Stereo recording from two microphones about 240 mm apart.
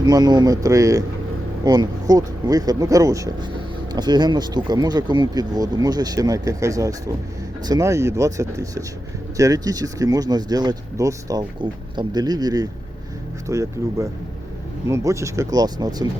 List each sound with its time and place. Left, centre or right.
0.0 s speech: centre